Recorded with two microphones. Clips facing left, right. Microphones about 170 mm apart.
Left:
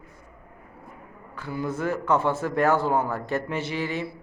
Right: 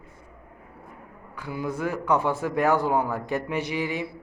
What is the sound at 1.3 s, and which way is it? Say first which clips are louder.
A man's voice: left 1 dB; 10° right (ahead or behind).